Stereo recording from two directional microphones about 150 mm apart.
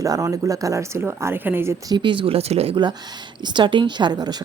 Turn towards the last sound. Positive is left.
turn(degrees=-25)  # may be behind; listen again after turning